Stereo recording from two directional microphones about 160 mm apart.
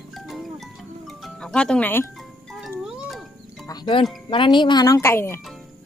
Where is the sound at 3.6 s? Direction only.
25° left (ahead or behind).